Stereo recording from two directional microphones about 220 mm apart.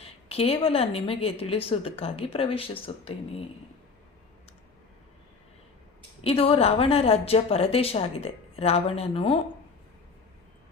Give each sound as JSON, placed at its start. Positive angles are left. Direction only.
{"t": 0.0, "sound": "a woman's voice", "side_deg": 25}
{"t": 6.2, "sound": "a woman's voice", "side_deg": 25}